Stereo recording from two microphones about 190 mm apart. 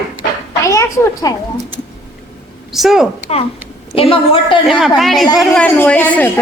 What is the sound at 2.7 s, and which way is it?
Speech, centre (ahead or behind).